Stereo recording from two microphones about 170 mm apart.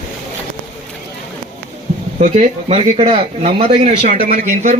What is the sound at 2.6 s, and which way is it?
A man's voice, 35° right (ahead or behind).